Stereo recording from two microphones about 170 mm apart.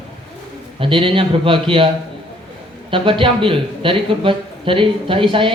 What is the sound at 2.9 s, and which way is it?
Speech, 30° right (ahead or behind).